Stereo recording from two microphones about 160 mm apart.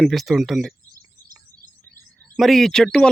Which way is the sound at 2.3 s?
Centre (ahead or behind).